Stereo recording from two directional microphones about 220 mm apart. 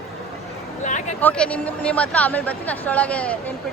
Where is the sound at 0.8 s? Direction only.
35° left (ahead or behind).